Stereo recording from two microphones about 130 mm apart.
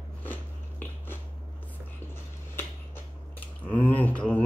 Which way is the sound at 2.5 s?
15° left (ahead or behind).